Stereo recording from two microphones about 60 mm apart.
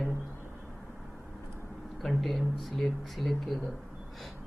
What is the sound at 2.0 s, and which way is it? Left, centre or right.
Speech, centre.